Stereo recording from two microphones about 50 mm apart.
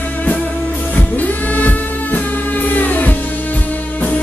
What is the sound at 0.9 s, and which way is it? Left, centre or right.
Music, left.